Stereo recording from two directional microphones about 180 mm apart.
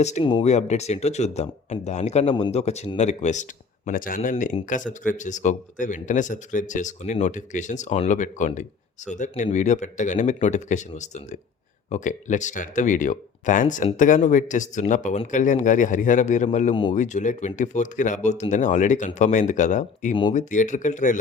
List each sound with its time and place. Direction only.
0.0 s a man's voice: 40° left (ahead or behind)